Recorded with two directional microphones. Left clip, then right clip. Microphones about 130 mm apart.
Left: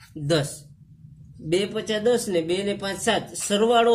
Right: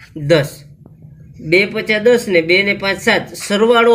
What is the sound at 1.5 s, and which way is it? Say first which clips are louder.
Speech: right 11 dB; 40° left (ahead or behind).